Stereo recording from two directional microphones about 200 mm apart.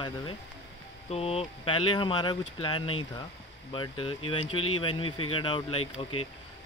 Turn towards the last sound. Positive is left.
turn(degrees=25)  # may be behind; listen again after turning